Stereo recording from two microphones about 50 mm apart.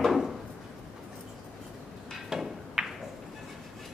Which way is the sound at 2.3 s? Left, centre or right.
Centre.